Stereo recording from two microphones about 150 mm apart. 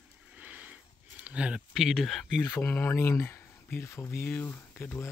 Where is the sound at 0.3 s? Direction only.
10° right (ahead or behind).